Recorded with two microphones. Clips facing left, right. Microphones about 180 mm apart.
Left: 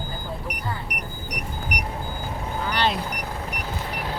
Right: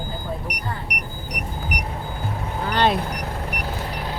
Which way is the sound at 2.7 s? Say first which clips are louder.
Right 5 dB; 50° right (ahead or behind).